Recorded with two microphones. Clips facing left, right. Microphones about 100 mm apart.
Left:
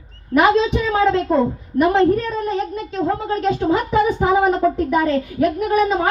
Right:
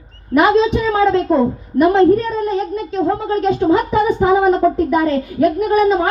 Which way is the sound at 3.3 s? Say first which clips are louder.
Right 5 dB; 25° right (ahead or behind).